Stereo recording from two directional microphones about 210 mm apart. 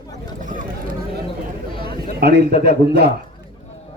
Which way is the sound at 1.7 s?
25° left (ahead or behind).